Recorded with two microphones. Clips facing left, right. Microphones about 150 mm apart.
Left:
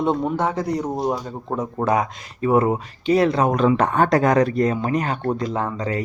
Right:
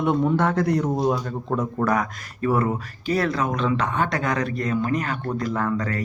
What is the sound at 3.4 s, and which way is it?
Speech, 45° left (ahead or behind).